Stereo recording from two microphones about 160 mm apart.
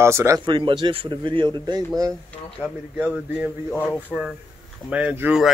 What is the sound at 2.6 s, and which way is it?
Speech, 10° right (ahead or behind).